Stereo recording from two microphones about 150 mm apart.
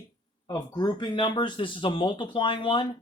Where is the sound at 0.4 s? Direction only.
30° left (ahead or behind).